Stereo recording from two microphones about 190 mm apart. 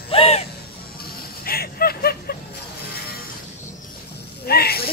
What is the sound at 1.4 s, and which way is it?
Vehicle, 55° left (ahead or behind).